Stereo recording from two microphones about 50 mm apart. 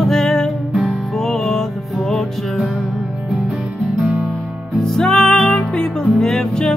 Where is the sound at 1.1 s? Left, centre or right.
Centre.